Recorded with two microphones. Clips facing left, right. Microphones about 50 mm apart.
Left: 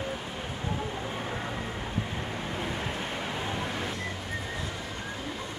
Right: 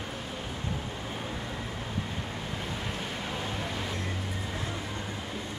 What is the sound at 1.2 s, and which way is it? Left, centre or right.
Vehicle, left.